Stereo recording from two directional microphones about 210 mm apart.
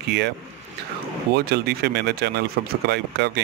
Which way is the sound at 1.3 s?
50° right (ahead or behind).